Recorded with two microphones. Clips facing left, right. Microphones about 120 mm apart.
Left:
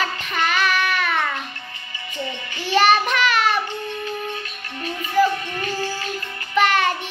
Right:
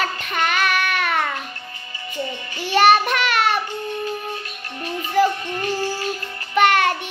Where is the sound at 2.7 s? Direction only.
50° right (ahead or behind).